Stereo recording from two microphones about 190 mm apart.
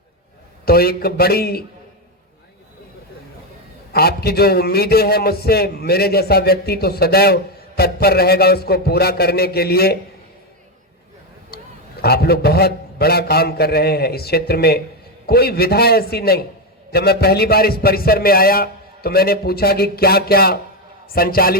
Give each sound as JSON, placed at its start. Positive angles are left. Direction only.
{"t": 0.6, "sound": "a man's voice", "side_deg": 55}
{"t": 3.9, "sound": "a man's voice", "side_deg": 55}
{"t": 12.0, "sound": "a man's voice", "side_deg": 55}